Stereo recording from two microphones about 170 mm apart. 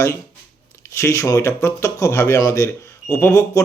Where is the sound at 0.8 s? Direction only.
15° left (ahead or behind).